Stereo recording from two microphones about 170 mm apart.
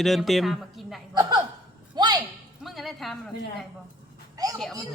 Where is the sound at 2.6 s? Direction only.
Centre (ahead or behind).